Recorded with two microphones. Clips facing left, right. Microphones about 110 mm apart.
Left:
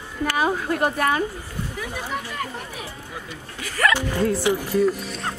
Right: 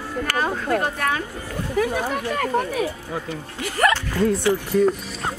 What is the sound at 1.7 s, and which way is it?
Speech, 60° right (ahead or behind).